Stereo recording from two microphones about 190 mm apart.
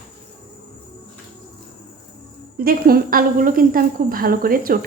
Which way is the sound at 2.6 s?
50° right (ahead or behind).